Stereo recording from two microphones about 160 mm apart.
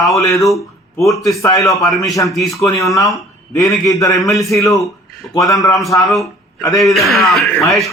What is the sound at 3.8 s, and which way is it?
Speech, 20° left (ahead or behind).